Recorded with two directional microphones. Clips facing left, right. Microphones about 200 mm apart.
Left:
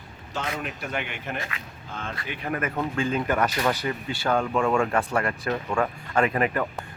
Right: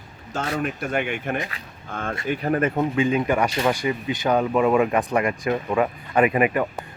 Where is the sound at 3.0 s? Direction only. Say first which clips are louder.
Right 3 dB; 10° right (ahead or behind).